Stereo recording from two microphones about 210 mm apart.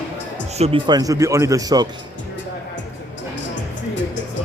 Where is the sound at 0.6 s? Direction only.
25° right (ahead or behind).